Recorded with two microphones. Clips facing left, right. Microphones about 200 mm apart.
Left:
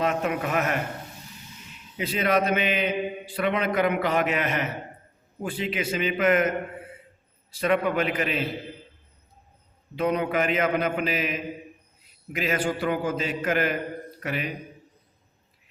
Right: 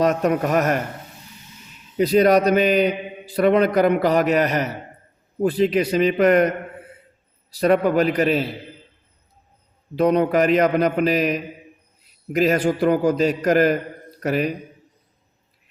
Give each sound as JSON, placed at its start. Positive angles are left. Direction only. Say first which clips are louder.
{"t": 0.0, "sound": "a man's voice", "louder": "right 7 dB", "side_deg": -40}
{"t": 2.0, "sound": "a man's voice", "louder": "right 9 dB", "side_deg": -40}
{"t": 7.5, "sound": "a man's voice", "louder": "right 6 dB", "side_deg": -40}
{"t": 9.9, "sound": "a man's voice", "louder": "right 7 dB", "side_deg": -40}